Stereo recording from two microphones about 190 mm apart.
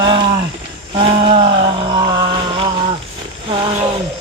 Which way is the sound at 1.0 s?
30° right (ahead or behind).